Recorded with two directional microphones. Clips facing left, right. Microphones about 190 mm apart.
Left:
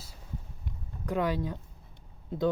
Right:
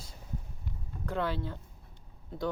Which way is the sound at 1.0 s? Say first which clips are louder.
Left 4 dB; 15° left (ahead or behind).